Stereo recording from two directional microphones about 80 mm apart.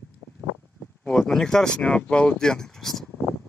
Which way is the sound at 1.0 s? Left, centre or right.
Centre.